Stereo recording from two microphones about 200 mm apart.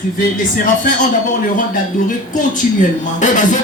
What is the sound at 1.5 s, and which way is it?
Music, 40° left (ahead or behind).